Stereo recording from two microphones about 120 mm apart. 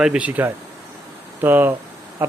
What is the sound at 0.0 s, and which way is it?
A man's voice, 10° right (ahead or behind).